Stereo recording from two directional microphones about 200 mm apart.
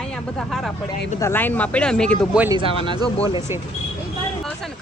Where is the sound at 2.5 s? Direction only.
25° right (ahead or behind).